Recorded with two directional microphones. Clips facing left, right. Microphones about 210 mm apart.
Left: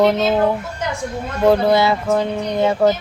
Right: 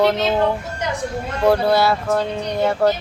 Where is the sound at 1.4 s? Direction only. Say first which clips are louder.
Left 2 dB; 15° left (ahead or behind).